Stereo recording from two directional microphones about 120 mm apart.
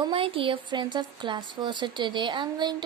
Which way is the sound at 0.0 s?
45° right (ahead or behind).